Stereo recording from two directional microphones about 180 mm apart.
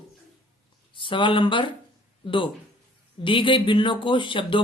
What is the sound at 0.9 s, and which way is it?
Speech, 25° left (ahead or behind).